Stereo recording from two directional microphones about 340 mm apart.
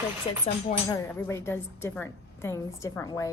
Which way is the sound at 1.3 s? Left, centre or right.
Centre.